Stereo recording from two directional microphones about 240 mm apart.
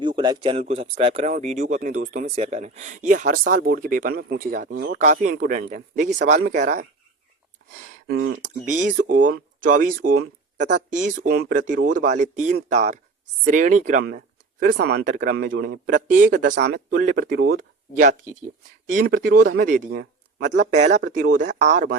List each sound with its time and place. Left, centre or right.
0.0 s speech: centre
8.0 s speech: right
8.4 s speech: right
11.2 s speech: right
20.6 s speech: right